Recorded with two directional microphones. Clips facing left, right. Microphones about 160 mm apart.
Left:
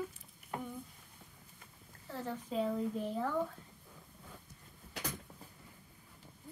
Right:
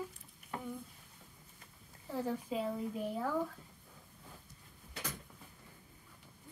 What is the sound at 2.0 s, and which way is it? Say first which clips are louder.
Speech: right 4 dB; 10° right (ahead or behind).